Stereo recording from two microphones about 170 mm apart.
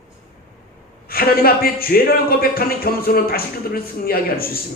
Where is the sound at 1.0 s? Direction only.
60° left (ahead or behind).